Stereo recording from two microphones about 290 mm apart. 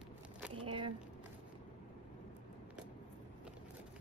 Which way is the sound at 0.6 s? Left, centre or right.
Centre.